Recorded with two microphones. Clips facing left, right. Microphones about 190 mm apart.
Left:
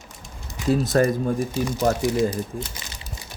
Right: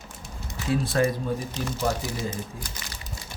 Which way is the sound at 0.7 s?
45° left (ahead or behind).